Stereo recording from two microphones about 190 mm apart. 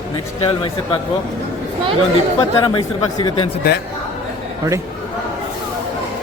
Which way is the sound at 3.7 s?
60° left (ahead or behind).